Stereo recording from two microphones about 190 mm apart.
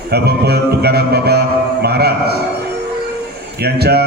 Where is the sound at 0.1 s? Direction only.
60° right (ahead or behind).